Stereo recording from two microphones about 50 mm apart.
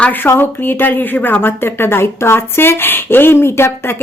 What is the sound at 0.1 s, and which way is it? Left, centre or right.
Speech, left.